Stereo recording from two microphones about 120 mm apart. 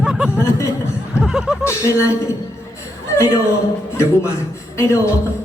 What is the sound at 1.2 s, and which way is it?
Snicker, 5° right (ahead or behind).